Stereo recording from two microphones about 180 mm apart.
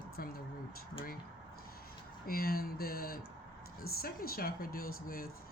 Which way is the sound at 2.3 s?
55° left (ahead or behind).